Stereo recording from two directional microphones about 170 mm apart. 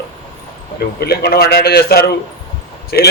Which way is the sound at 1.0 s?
65° left (ahead or behind).